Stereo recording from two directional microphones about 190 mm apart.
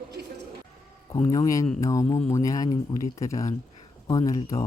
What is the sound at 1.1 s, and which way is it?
Speech, 15° left (ahead or behind).